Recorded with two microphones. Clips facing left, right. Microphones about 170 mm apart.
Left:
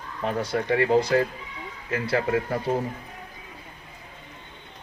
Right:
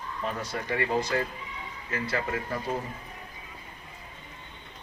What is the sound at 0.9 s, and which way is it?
A man's voice, 30° left (ahead or behind).